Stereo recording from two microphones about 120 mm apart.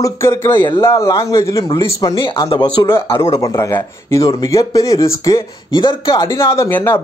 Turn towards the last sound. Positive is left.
turn(degrees=20)  # may be behind; listen again after turning